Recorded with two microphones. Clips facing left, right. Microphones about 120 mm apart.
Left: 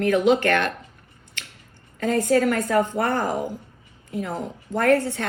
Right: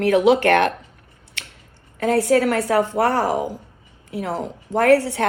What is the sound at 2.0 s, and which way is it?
Speech, 65° right (ahead or behind).